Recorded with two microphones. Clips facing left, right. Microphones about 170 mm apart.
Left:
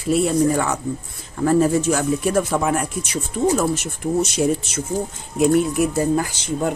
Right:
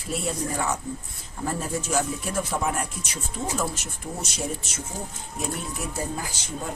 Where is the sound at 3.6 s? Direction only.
70° left (ahead or behind).